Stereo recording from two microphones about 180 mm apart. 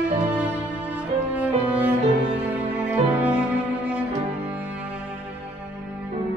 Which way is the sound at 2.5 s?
10° right (ahead or behind).